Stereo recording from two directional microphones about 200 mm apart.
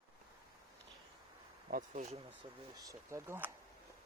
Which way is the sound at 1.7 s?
40° right (ahead or behind).